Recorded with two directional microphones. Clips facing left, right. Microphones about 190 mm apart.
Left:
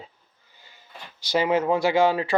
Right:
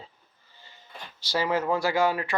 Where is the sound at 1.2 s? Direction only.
20° left (ahead or behind).